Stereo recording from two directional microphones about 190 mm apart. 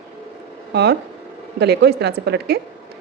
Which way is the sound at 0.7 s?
60° right (ahead or behind).